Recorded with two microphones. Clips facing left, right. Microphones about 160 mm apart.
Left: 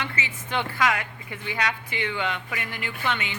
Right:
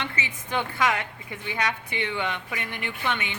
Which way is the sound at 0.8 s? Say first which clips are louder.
Left 1 dB; 20° right (ahead or behind).